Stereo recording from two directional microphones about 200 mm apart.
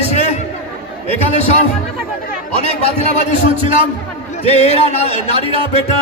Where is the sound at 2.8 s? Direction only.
35° left (ahead or behind).